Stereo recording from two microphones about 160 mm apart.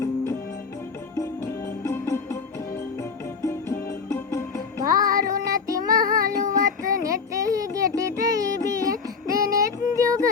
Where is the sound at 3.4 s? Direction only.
20° left (ahead or behind).